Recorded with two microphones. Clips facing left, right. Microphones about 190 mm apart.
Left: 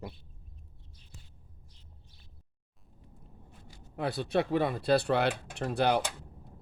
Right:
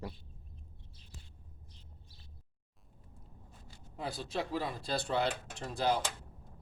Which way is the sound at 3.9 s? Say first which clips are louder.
Left 8 dB; 65° left (ahead or behind).